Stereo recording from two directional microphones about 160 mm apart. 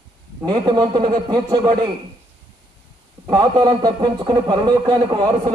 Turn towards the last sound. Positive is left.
turn(degrees=-25)  # may be behind; listen again after turning